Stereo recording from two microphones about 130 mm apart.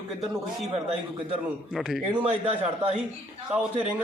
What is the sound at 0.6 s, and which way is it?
Speech, 45° right (ahead or behind).